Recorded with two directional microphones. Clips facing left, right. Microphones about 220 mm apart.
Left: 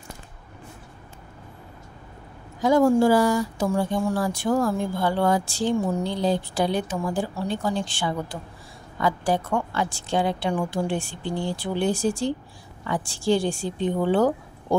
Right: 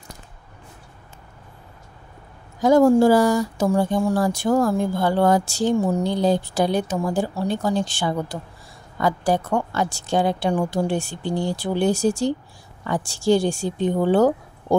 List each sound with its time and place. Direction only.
2.6 s a woman's voice: 40° right (ahead or behind)